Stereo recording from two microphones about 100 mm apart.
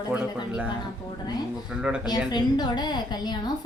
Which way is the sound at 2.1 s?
45° left (ahead or behind).